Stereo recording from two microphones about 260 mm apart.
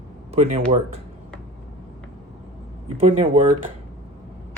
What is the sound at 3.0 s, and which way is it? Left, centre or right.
Speech, right.